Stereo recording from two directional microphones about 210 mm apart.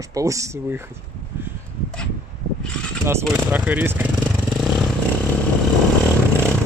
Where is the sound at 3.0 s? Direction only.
10° right (ahead or behind).